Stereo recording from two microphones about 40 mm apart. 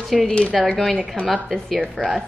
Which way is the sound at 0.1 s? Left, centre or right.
Centre.